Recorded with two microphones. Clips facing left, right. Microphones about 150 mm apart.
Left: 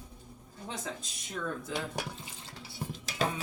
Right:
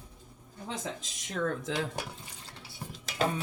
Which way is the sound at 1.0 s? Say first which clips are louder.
Right 5 dB; 90° right.